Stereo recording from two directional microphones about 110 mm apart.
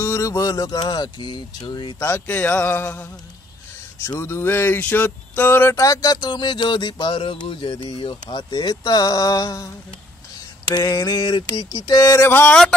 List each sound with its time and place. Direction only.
0.0 s speech: 25° left (ahead or behind)
2.0 s speech: 20° left (ahead or behind)
4.2 s speech: 20° left (ahead or behind)
12.3 s a sound: 20° left (ahead or behind)